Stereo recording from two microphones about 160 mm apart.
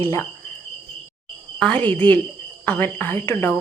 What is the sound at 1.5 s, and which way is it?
Speech, 5° left (ahead or behind).